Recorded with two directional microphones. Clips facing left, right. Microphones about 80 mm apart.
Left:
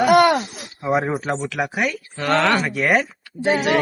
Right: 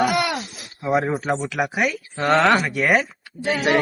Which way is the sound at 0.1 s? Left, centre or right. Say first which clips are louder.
Left 9 dB; left.